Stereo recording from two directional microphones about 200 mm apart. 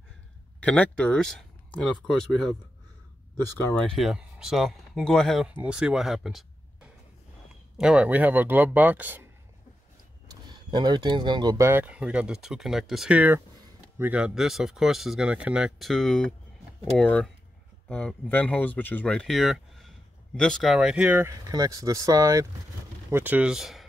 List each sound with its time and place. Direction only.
0.6 s speech: 5° left (ahead or behind)
3.5 s speech: 5° left (ahead or behind); by 9.3 s 10° right (ahead or behind)
10.5 s speech: 20° right (ahead or behind); by 23.9 s centre (ahead or behind)